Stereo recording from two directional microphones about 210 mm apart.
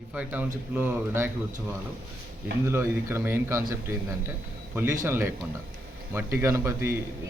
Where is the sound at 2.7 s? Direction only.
10° right (ahead or behind).